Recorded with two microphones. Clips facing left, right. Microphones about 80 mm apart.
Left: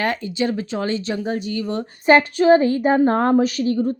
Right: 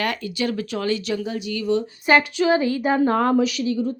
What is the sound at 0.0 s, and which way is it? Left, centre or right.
Speech, left.